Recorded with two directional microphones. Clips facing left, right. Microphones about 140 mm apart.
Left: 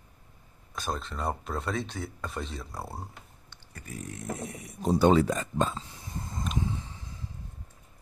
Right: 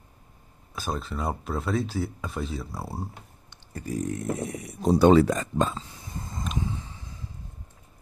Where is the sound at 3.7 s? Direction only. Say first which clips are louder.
Right 11 dB; 35° right (ahead or behind).